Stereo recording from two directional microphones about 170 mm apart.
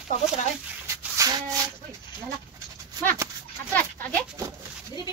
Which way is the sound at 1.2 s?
20° right (ahead or behind).